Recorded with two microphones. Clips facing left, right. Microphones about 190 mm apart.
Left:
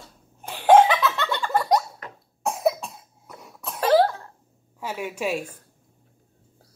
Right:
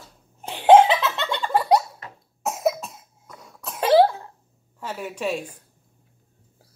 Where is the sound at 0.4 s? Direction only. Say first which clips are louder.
Right 2 dB; 20° right (ahead or behind).